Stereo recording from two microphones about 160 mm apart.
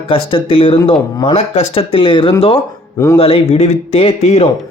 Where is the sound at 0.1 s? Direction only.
35° left (ahead or behind).